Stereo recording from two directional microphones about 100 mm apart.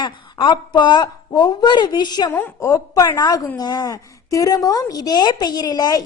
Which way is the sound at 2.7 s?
35° left (ahead or behind).